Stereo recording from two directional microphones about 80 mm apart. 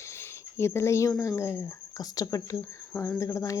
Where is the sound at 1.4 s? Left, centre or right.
Left.